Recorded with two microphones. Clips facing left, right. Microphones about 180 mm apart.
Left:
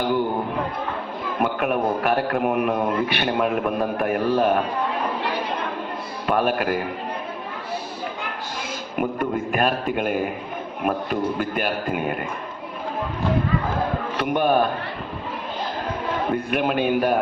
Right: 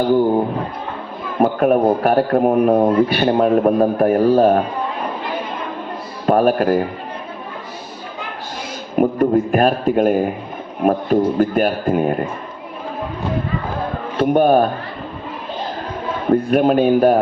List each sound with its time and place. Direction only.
1.4 s speech: 35° right (ahead or behind)
6.2 s speech: 40° right (ahead or behind)
9.0 s speech: 40° right (ahead or behind)
14.2 s speech: 40° right (ahead or behind)
16.3 s speech: 40° right (ahead or behind)